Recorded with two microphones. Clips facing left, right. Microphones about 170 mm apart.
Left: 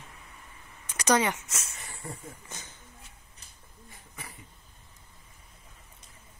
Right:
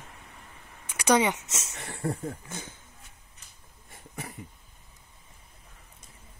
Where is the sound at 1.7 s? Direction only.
80° right.